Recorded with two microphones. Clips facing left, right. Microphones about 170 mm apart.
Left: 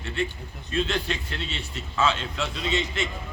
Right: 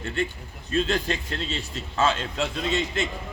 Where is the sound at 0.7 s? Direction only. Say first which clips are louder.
Right 2 dB; 40° right (ahead or behind).